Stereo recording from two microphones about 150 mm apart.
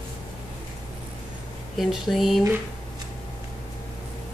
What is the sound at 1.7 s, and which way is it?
Speech, centre (ahead or behind).